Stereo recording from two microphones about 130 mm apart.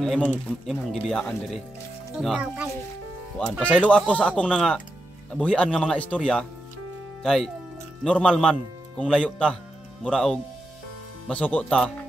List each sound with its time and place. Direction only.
0.0 s speech: 5° left (ahead or behind)
3.6 s speech: 10° left (ahead or behind)